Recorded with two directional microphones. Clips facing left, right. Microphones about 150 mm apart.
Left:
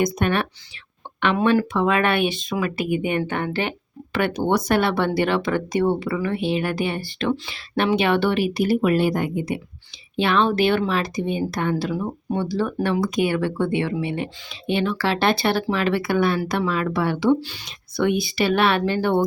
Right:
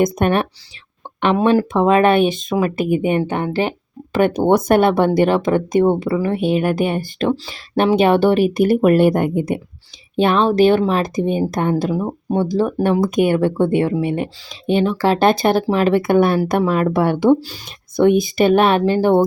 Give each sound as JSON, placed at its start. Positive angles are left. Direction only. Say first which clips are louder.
{"t": 0.0, "sound": "speech", "louder": "right 5 dB", "side_deg": -50}
{"t": 10.2, "sound": "speech", "louder": "right 5 dB", "side_deg": -45}